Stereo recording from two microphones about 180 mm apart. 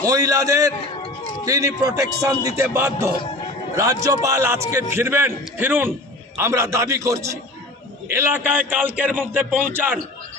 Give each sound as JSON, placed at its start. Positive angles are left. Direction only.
{"t": 0.0, "sound": "a man's voice", "side_deg": -20}